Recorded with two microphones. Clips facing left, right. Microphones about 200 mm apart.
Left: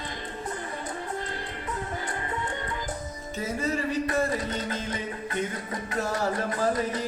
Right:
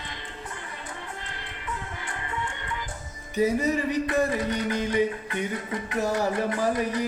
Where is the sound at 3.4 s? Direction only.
15° right (ahead or behind).